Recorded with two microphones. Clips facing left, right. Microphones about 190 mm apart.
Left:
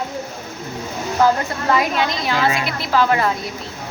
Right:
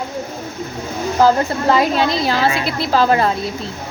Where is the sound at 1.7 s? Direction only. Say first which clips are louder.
Right 3 dB; 30° right (ahead or behind).